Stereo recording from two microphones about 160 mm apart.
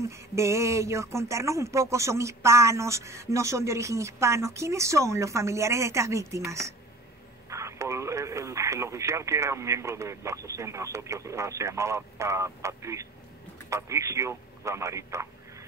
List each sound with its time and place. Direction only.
0.1 s speech: 20° right (ahead or behind)